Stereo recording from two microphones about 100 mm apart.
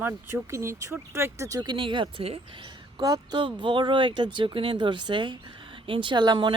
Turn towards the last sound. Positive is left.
turn(degrees=-50)  # may be behind; listen again after turning